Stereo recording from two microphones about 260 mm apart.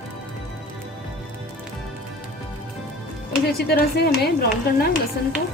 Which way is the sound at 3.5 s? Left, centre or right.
Left.